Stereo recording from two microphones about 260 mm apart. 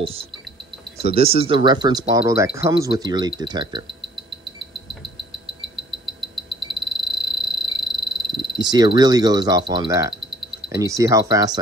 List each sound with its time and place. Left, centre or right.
0.0 s speech: right
6.3 s frog: centre
8.5 s speech: centre